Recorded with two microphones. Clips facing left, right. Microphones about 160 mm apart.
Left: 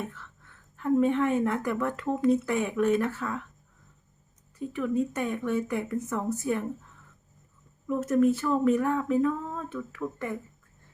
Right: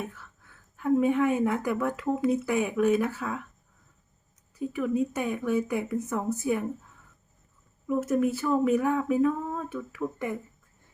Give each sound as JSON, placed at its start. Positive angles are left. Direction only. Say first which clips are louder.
{"t": 0.0, "sound": "a woman's voice", "louder": "even", "side_deg": -10}
{"t": 4.5, "sound": "a woman's voice", "louder": "right 1 dB", "side_deg": -10}
{"t": 7.9, "sound": "a woman's voice", "louder": "left 2 dB", "side_deg": -10}